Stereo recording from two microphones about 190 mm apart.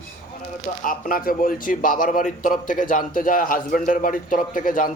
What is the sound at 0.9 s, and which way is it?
A man's voice, 50° left (ahead or behind).